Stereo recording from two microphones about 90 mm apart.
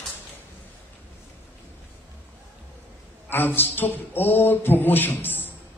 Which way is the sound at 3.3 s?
25° left (ahead or behind).